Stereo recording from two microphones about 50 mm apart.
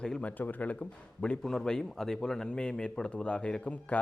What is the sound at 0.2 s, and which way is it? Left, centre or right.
Speech, left.